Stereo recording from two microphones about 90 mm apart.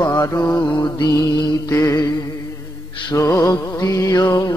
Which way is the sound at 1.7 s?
40° left (ahead or behind).